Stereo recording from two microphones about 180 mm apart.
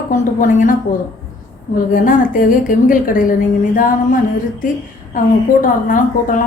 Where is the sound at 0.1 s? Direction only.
45° left (ahead or behind).